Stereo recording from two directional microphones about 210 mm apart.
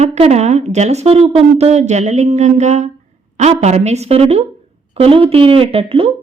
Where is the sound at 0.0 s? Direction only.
30° right (ahead or behind).